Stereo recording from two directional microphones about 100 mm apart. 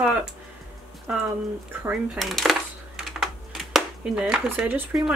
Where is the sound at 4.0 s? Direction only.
10° right (ahead or behind).